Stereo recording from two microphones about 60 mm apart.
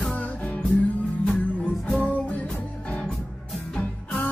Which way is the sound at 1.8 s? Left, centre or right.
Centre.